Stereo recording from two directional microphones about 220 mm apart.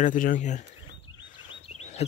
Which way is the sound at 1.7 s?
30° left (ahead or behind).